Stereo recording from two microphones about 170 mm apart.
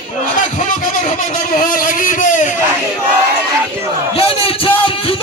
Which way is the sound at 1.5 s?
55° left (ahead or behind).